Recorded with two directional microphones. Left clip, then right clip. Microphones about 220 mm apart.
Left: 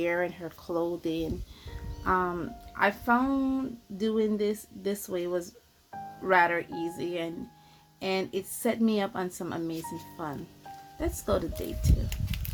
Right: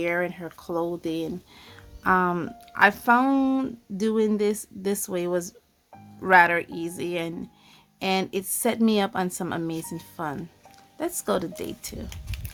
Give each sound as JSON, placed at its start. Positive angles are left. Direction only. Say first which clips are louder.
{"t": 0.0, "sound": "a woman's voice", "louder": "right 3 dB", "side_deg": -20}
{"t": 2.0, "sound": "a woman's voice", "louder": "right 6 dB", "side_deg": -30}